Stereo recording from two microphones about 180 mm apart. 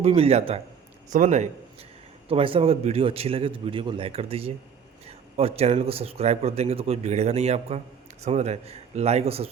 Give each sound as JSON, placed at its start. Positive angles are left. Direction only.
{"t": 0.0, "sound": "a man's voice", "side_deg": -35}
{"t": 2.3, "sound": "speech", "side_deg": -30}